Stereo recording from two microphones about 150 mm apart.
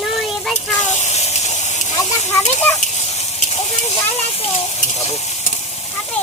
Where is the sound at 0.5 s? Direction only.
50° left (ahead or behind).